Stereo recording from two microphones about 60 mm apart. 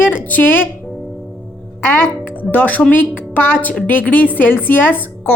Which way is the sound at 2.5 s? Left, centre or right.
Left.